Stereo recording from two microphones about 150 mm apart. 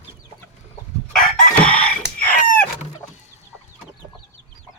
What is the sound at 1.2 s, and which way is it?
Chicken, 10° left (ahead or behind).